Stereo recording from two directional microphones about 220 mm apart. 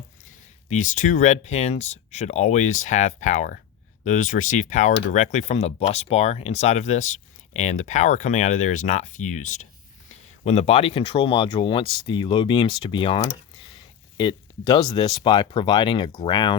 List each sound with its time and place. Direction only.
0.7 s speech: 35° left (ahead or behind)